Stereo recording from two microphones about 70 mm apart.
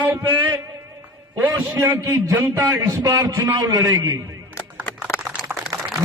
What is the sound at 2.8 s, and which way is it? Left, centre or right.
A man's voice, right.